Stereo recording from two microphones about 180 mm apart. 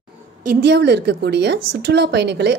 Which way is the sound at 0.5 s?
65° right (ahead or behind).